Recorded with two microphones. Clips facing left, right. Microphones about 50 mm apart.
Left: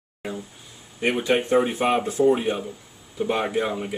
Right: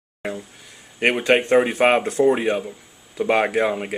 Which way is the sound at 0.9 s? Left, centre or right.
Right.